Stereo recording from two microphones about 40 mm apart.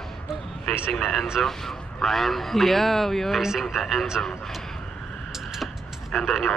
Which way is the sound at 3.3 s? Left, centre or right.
Centre.